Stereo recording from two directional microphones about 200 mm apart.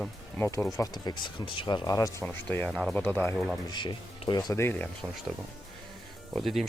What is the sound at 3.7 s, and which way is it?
Speech, 25° left (ahead or behind).